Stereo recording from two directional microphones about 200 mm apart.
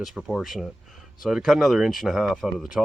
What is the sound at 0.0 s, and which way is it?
Speech, centre (ahead or behind).